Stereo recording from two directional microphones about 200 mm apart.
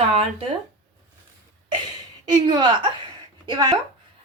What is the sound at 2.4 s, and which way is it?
A woman's voice, 25° right (ahead or behind).